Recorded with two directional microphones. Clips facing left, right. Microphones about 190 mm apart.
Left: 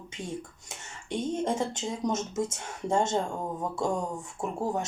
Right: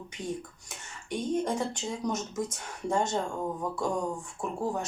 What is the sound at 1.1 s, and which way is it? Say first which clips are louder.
Speech: even; 25° left (ahead or behind).